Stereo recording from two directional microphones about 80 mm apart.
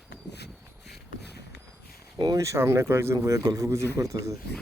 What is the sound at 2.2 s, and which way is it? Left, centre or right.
Speech, right.